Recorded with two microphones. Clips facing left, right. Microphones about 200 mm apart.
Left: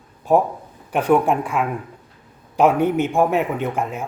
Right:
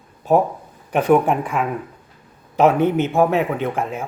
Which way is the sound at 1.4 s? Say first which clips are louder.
Even; 10° left (ahead or behind).